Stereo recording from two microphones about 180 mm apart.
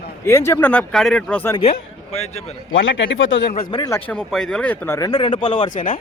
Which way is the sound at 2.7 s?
85° left.